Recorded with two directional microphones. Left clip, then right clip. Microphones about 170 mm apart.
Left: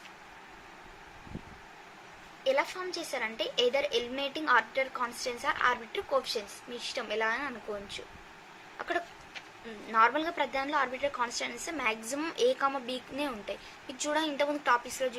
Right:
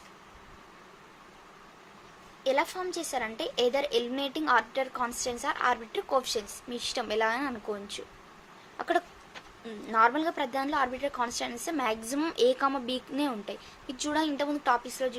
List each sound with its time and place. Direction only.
2.4 s a woman's voice: 55° right (ahead or behind)
8.8 s a sound: 50° right (ahead or behind)
9.6 s a woman's voice: 45° right (ahead or behind)